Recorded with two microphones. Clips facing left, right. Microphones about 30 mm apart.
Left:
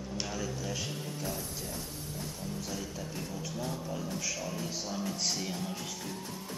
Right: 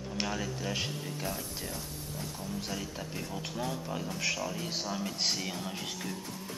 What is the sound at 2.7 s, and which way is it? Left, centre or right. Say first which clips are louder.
Speech: right 1 dB; right.